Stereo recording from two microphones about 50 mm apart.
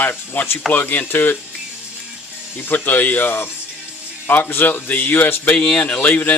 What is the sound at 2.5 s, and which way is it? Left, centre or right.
Speech, left.